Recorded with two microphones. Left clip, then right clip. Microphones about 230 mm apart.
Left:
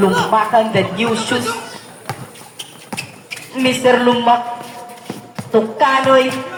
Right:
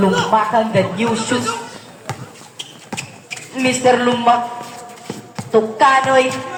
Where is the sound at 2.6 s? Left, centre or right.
Centre.